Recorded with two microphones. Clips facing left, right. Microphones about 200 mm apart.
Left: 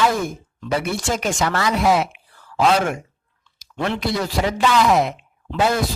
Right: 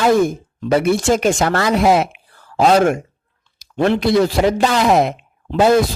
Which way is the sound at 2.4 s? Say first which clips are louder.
Right 5 dB; 35° right (ahead or behind).